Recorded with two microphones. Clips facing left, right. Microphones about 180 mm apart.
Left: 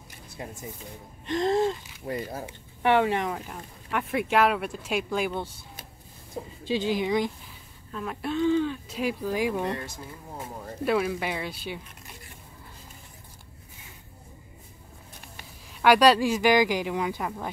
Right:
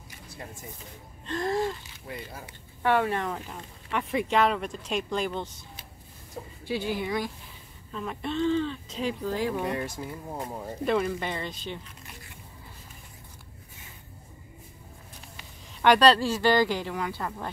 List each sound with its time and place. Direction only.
0.4 s speech: 15° left (ahead or behind)
1.2 s gasp: 20° left (ahead or behind)
2.0 s speech: 40° left (ahead or behind)
2.8 s speech: 20° left (ahead or behind)
6.6 s a woman's voice: 20° left (ahead or behind)
7.9 s speech: centre (ahead or behind)
10.9 s speech: 5° left (ahead or behind)
15.8 s speech: 10° left (ahead or behind)